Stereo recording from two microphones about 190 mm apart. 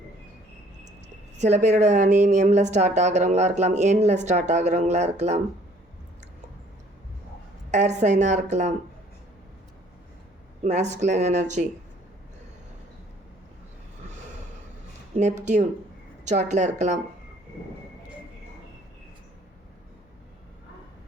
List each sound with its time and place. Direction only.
1.4 s a woman's voice: 40° right (ahead or behind)
7.7 s a woman's voice: 40° right (ahead or behind)
10.6 s a woman's voice: 40° right (ahead or behind)
15.1 s a woman's voice: 40° right (ahead or behind)